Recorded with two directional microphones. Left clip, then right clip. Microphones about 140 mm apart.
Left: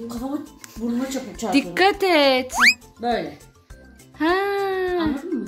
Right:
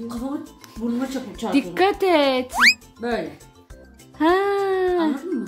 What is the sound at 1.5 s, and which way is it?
Speech, 10° right (ahead or behind).